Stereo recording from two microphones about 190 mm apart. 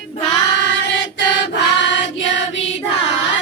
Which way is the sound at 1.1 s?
70° left (ahead or behind).